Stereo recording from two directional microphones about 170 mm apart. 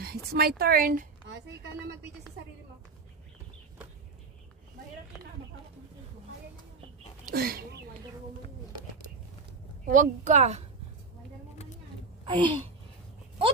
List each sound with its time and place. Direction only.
0.0 s a woman's voice: 65° right (ahead or behind)
7.3 s speech: 60° right (ahead or behind)
9.8 s a woman's voice: 50° right (ahead or behind)
12.2 s speech: 30° right (ahead or behind)